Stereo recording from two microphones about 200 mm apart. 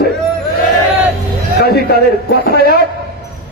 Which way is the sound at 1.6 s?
50° left (ahead or behind).